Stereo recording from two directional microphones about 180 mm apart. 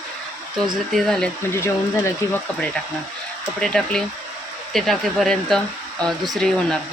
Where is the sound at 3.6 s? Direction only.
5° left (ahead or behind).